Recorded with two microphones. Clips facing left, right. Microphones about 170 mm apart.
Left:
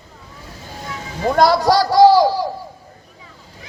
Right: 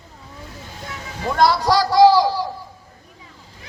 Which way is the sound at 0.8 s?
45° left (ahead or behind).